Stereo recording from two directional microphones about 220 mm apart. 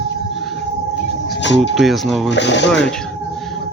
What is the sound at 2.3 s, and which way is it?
Speech, 55° left (ahead or behind).